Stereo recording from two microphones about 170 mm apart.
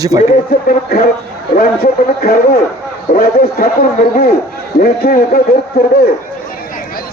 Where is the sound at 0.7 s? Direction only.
60° left (ahead or behind).